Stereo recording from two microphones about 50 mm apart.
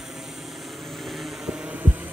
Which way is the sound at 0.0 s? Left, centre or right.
Centre.